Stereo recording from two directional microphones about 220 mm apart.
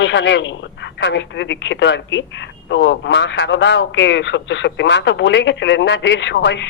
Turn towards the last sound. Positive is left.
turn(degrees=55)  # may be behind; listen again after turning